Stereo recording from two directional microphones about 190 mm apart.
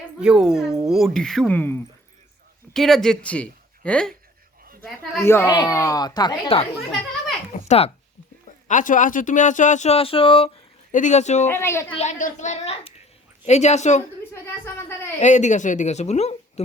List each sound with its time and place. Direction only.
0.2 s speech: 5° right (ahead or behind)
5.2 s speech: 15° left (ahead or behind)
7.5 s a sound: 35° left (ahead or behind)
8.6 s speech: 45° left (ahead or behind)
11.4 s a child's voice: 15° left (ahead or behind)
11.9 s speech: 35° left (ahead or behind)
14.6 s speech: 10° left (ahead or behind)
15.2 s speech: 40° left (ahead or behind)